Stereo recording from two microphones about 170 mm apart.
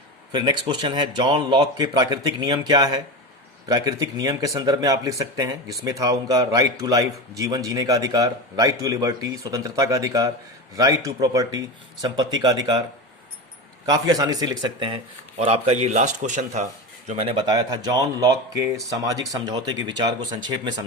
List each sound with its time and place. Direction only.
0.3 s a man's voice: 25° right (ahead or behind)
13.8 s a man's voice: 20° right (ahead or behind)
15.4 s a man's voice: 40° right (ahead or behind); by 20.0 s 25° right (ahead or behind)